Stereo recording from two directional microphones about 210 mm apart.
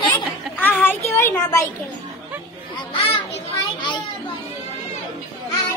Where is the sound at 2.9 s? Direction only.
25° left (ahead or behind).